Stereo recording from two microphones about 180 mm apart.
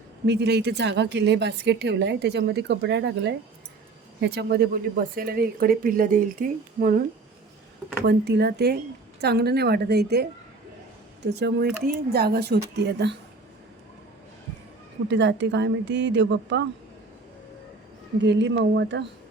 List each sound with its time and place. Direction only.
0.3 s a woman's voice: 70° right (ahead or behind)
4.2 s speech: 70° right (ahead or behind); by 7.0 s 50° right (ahead or behind)
8.0 s a woman's voice: 70° right (ahead or behind)
15.0 s speech: 85° right
18.2 s a woman's voice: 75° right (ahead or behind)